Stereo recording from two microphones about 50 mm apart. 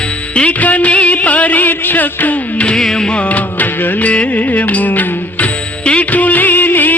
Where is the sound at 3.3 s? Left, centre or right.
Left.